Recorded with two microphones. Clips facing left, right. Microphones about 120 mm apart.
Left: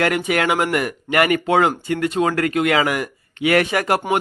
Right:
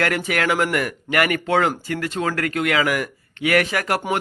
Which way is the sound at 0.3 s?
20° left (ahead or behind).